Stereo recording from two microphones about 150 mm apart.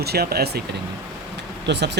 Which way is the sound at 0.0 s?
90° right.